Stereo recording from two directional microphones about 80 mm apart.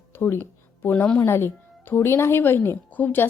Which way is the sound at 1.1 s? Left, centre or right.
Left.